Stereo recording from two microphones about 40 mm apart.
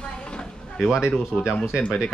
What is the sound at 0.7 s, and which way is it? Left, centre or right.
Speech, centre.